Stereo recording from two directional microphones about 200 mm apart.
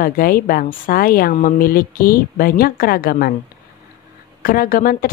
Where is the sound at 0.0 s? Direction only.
45° left (ahead or behind).